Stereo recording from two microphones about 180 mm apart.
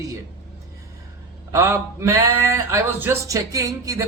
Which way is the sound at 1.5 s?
15° right (ahead or behind).